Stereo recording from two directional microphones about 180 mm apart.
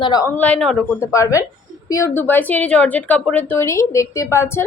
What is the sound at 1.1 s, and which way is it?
A woman's voice, 15° left (ahead or behind).